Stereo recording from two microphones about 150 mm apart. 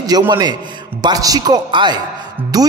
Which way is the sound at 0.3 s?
30° right (ahead or behind).